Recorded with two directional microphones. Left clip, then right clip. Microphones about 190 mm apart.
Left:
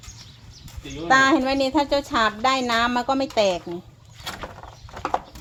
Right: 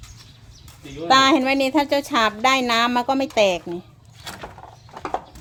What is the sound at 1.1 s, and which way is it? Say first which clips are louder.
Speech: right 2 dB; 25° right (ahead or behind).